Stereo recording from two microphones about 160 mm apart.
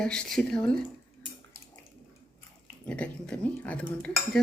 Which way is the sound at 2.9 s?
5° left (ahead or behind).